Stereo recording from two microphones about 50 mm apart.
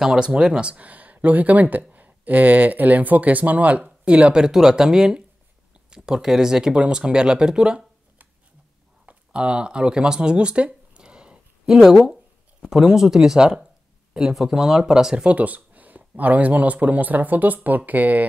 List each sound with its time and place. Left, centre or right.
0.0 s speech: centre
9.0 s a sound: right
11.6 s speech: centre
15.2 s speech: right